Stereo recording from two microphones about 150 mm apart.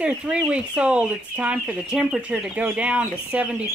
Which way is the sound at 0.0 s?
5° right (ahead or behind).